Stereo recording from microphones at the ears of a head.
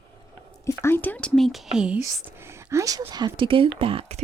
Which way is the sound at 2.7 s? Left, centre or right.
Right.